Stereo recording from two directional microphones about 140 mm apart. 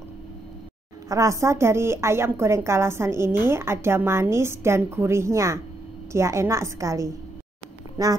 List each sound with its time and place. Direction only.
1.0 s a woman's voice: 25° right (ahead or behind)